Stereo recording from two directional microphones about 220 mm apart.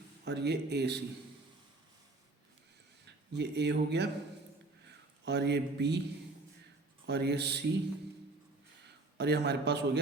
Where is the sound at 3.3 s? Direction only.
50° right (ahead or behind).